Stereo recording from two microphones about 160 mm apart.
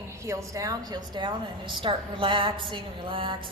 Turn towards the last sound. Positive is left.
turn(degrees=-30)  # may be behind; listen again after turning